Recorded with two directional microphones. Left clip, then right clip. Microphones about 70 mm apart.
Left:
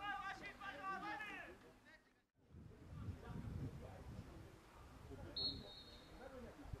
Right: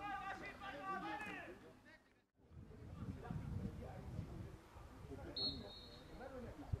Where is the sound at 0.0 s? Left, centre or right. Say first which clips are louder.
Right 1 dB; centre.